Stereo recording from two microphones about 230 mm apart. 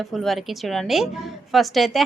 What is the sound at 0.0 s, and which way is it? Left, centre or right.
A woman's voice, centre.